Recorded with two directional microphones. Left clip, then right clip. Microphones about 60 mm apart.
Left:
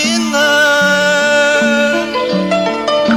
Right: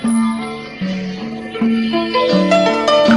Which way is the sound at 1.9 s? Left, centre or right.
Right.